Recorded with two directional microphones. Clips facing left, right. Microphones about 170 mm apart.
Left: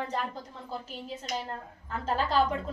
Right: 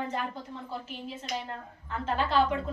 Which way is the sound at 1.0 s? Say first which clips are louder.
Left 1 dB; 40° left (ahead or behind).